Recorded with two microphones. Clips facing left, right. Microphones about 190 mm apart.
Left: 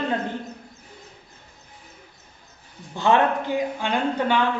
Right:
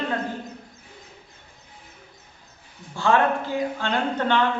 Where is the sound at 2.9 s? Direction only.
20° left (ahead or behind).